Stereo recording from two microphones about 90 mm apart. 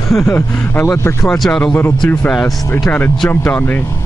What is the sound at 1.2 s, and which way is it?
Speech, 5° left (ahead or behind).